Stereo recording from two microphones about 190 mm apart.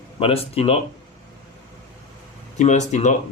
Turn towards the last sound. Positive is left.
turn(degrees=40)  # may be behind; listen again after turning